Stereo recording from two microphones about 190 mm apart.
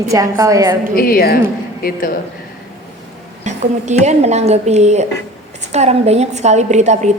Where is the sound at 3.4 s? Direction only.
35° right (ahead or behind).